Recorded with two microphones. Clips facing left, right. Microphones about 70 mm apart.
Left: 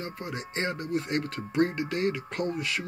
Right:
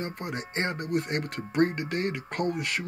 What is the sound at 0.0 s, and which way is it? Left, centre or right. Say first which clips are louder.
Speech: right 2 dB; right.